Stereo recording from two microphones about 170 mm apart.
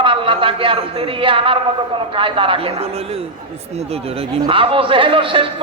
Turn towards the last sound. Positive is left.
turn(degrees=-30)  # may be behind; listen again after turning